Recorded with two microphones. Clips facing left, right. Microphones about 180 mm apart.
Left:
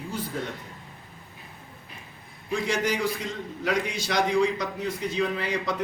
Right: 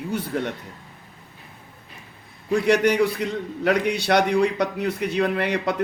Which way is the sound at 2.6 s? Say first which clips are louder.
Right 8 dB; 65° right (ahead or behind).